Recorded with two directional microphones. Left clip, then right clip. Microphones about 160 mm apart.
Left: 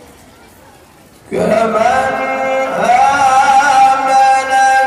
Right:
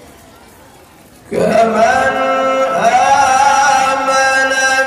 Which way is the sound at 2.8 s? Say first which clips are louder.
Left 1 dB; 55° right (ahead or behind).